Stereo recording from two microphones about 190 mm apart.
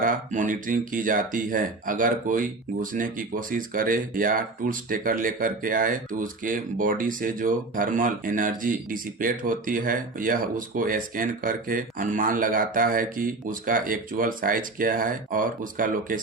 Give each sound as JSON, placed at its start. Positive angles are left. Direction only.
{"t": 0.0, "sound": "speech", "side_deg": -45}